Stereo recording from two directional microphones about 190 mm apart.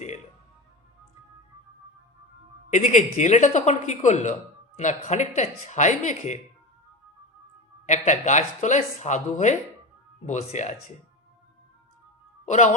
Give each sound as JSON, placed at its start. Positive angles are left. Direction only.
{"t": 2.6, "sound": "speech", "side_deg": 40}
{"t": 7.9, "sound": "speech", "side_deg": 40}
{"t": 12.5, "sound": "speech", "side_deg": 40}